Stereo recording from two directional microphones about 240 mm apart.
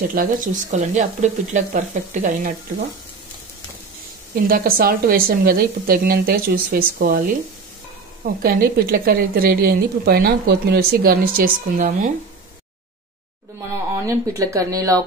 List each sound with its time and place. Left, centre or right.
0.1 s a woman's voice: right
4.4 s a woman's voice: right
8.4 s a woman's voice: right
14.0 s speech: centre